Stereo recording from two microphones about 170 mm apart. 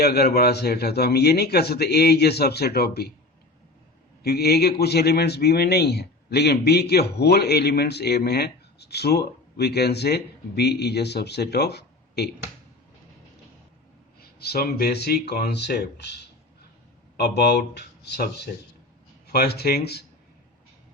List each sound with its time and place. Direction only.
0.0 s a man's voice: 70° left (ahead or behind)
4.2 s a man's voice: 65° left (ahead or behind)
14.2 s a man's voice: 70° left (ahead or behind)
19.3 s a man's voice: 70° left (ahead or behind)